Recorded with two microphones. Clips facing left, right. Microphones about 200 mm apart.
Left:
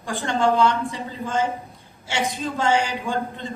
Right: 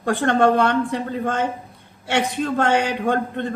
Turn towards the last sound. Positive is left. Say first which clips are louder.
# right 6 dB
turn(degrees=-60)  # may be behind; listen again after turning